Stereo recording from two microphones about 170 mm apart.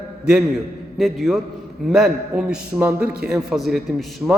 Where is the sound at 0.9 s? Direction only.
Centre (ahead or behind).